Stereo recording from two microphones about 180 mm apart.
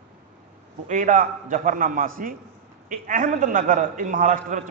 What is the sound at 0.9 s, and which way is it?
A man's voice, 45° right (ahead or behind).